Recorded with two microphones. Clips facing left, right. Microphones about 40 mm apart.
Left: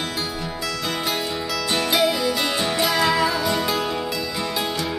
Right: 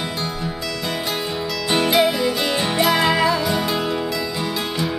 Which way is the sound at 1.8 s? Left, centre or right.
Centre.